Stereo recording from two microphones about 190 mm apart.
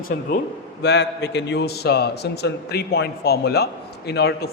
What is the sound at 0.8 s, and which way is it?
A man's voice, 65° left (ahead or behind).